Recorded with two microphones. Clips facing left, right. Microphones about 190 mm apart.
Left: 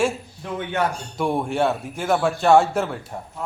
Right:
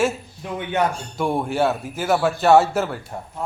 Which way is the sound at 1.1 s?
Centre (ahead or behind).